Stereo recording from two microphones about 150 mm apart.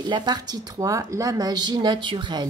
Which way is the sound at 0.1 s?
30° right (ahead or behind).